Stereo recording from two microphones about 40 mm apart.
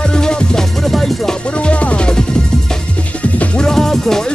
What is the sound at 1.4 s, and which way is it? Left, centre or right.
Music, left.